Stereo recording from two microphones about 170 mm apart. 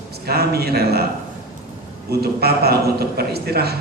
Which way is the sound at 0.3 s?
70° right (ahead or behind).